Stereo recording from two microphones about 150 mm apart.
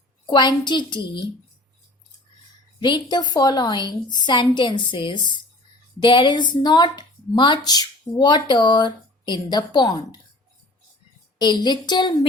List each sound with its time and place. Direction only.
0.3 s speech: 30° left (ahead or behind)
2.8 s a woman's voice: 30° left (ahead or behind)
11.3 s speech: 30° left (ahead or behind)